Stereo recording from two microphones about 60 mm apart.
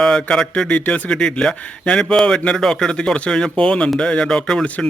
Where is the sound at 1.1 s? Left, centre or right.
Centre.